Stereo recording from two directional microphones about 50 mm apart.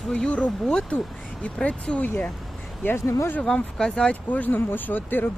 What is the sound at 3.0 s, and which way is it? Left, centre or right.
Speech, left.